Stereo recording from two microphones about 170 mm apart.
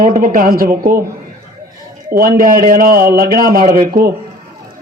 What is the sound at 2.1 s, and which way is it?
A man's voice, 60° right (ahead or behind).